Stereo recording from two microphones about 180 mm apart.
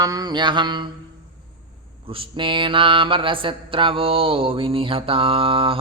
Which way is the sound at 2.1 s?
30° right (ahead or behind).